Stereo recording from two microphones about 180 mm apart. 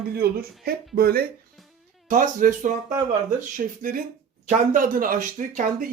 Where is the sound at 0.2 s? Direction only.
60° right (ahead or behind).